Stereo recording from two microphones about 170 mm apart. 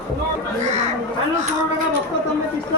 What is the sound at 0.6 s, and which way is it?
Chatter, 45° right (ahead or behind).